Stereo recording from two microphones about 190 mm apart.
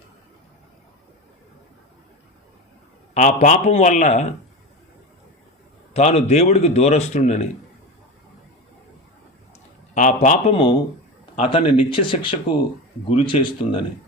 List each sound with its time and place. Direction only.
3.2 s speech: 40° left (ahead or behind)
5.9 s speech: 35° left (ahead or behind)
9.9 s speech: 40° left (ahead or behind)
10.5 s speech: 25° left (ahead or behind)